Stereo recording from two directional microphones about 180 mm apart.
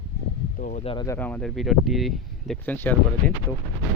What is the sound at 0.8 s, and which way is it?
Speech, 30° left (ahead or behind).